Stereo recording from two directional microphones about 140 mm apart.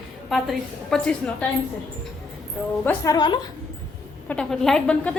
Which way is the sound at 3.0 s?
30° left (ahead or behind).